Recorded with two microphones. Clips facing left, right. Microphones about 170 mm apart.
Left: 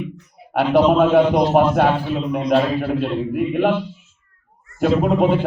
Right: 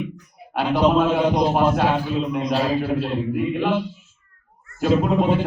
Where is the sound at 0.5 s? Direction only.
60° left (ahead or behind).